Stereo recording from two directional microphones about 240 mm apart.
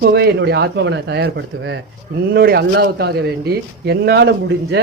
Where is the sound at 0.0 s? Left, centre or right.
Right.